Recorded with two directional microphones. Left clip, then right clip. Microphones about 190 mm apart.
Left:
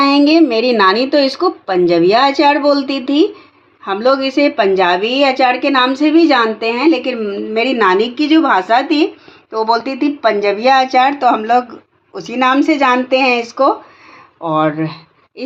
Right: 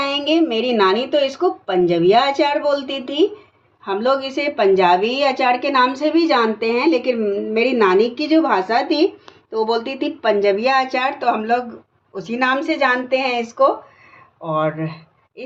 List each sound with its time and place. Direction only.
0.0 s a woman's voice: 40° left (ahead or behind)